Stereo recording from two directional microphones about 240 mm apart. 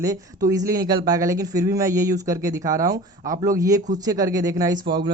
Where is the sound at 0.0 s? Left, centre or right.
Centre.